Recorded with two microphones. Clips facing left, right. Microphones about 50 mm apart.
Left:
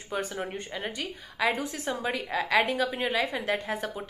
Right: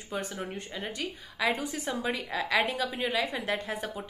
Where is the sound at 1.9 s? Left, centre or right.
Centre.